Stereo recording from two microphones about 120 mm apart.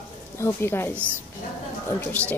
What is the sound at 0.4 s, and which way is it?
Speech, 20° left (ahead or behind).